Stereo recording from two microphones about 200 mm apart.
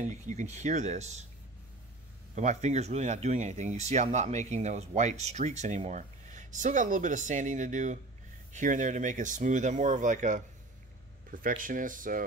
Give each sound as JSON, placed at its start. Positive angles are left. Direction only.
{"t": 0.0, "sound": "speech", "side_deg": -35}
{"t": 2.3, "sound": "speech", "side_deg": -35}